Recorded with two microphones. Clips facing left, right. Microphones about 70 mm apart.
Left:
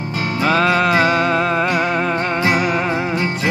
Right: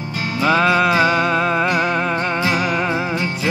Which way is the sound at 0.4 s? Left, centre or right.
Centre.